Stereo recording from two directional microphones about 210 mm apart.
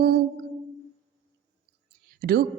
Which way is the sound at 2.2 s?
50° right (ahead or behind).